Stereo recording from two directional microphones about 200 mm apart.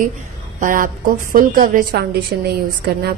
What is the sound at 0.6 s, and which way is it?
A woman's voice, 40° right (ahead or behind).